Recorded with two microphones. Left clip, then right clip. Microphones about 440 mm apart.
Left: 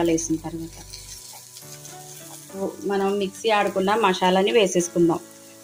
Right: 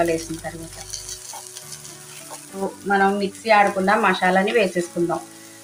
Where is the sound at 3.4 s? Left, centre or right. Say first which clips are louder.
Right 5 dB; left.